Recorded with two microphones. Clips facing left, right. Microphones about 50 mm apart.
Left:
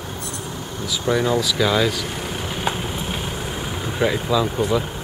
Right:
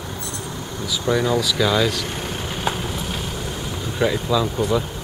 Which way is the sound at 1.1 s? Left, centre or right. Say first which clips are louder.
Even; centre.